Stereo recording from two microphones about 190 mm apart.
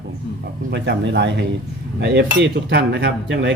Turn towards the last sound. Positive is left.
turn(degrees=-65)  # may be behind; listen again after turning